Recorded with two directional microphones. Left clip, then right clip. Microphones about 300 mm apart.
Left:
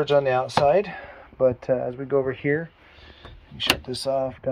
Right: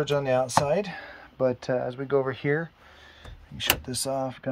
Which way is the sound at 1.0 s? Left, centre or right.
Right.